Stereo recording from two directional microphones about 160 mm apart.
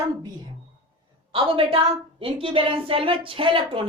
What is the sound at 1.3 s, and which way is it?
Speech, 35° right (ahead or behind).